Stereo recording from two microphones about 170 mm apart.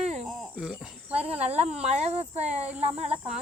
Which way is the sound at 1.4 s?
40° right (ahead or behind).